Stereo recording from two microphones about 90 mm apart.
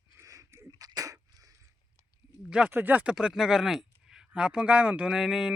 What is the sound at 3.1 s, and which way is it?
Speech, 5° right (ahead or behind).